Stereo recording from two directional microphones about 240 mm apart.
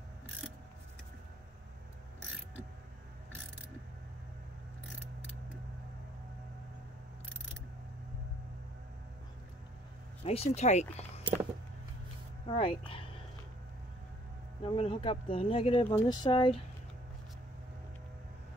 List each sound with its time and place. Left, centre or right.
10.2 s speech: left
12.4 s speech: left
14.6 s speech: left